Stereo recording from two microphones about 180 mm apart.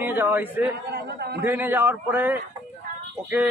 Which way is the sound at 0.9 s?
65° right (ahead or behind).